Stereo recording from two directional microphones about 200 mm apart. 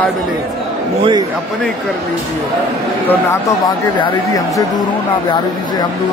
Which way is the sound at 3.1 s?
15° left (ahead or behind).